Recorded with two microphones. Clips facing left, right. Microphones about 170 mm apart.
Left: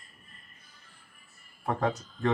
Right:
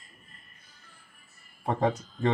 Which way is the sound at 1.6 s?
20° right (ahead or behind).